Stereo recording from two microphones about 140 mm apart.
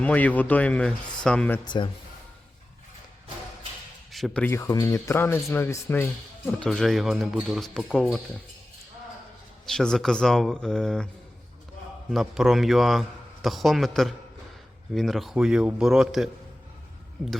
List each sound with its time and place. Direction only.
0.0 s speech: 10° left (ahead or behind)
1.6 s speech: 35° left (ahead or behind)
4.1 s speech: centre (ahead or behind)
4.4 s speech: 20° left (ahead or behind); by 8.2 s centre (ahead or behind)
9.6 s a man's voice: 5° left (ahead or behind)
12.1 s a man's voice: 5° right (ahead or behind)